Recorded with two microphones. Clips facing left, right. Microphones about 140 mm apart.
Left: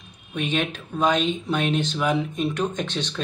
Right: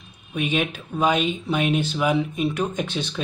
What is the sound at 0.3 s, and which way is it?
Speech, 10° right (ahead or behind).